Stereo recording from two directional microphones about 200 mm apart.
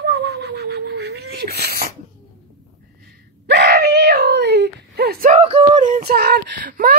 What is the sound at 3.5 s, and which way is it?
Screaming, 55° right (ahead or behind).